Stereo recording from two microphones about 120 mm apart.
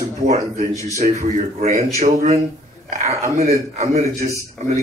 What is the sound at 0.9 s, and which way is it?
Speech, 75° right (ahead or behind).